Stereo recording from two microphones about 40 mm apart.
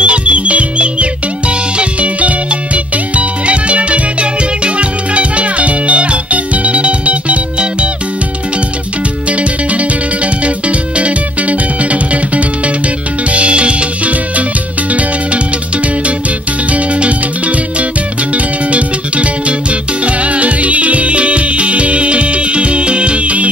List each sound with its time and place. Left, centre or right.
0.0 s music: right
9.3 s music: right
16.7 s music: right